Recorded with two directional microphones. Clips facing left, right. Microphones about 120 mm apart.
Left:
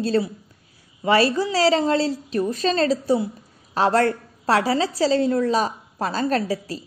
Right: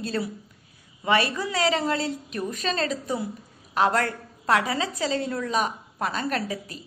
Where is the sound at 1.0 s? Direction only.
30° left (ahead or behind).